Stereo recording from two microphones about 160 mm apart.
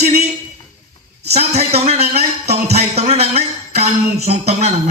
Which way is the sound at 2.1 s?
85° right.